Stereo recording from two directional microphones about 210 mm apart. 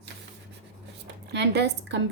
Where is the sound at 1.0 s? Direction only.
55° right (ahead or behind).